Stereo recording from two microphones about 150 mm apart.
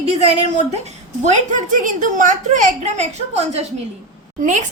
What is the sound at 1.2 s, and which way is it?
A woman's voice, 60° right (ahead or behind).